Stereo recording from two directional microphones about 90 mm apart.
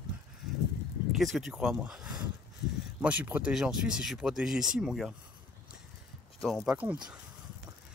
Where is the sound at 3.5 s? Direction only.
5° right (ahead or behind).